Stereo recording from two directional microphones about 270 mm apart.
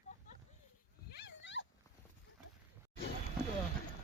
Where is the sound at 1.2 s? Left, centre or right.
Left.